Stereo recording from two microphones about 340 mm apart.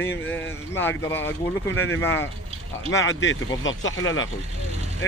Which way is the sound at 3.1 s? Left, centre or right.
Left.